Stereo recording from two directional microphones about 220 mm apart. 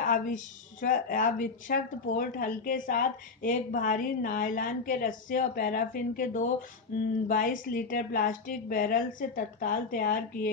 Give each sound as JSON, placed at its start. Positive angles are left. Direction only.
{"t": 0.0, "sound": "speech", "side_deg": 35}